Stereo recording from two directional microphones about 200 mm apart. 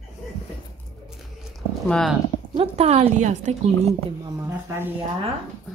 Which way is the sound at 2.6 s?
30° right (ahead or behind).